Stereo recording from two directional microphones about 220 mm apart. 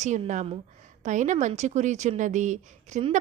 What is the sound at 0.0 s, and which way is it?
Speech, 35° right (ahead or behind).